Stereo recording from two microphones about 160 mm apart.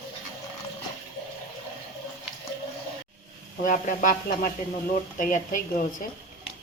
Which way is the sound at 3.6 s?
55° left (ahead or behind).